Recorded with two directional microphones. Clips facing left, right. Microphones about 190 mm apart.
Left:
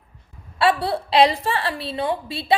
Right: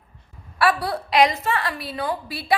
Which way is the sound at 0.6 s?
25° left (ahead or behind).